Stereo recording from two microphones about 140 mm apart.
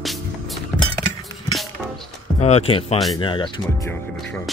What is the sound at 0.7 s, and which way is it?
Chink, 5° left (ahead or behind).